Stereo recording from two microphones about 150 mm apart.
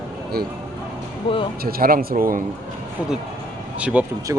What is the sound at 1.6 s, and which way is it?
Speech, 85° right.